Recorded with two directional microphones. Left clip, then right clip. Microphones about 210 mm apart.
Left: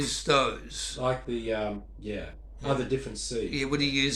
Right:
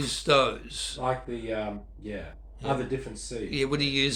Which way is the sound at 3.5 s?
45° right (ahead or behind).